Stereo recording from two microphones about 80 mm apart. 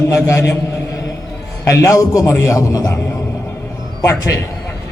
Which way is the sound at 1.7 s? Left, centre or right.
Left.